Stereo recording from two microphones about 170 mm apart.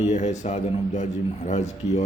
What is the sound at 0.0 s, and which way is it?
A man's voice, 45° left (ahead or behind).